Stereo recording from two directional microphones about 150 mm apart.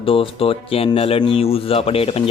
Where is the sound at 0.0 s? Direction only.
35° left (ahead or behind).